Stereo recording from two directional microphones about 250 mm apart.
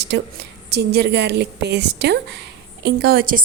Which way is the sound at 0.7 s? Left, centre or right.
Right.